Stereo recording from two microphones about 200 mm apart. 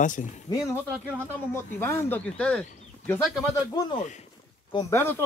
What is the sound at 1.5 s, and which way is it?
Speech, 15° left (ahead or behind).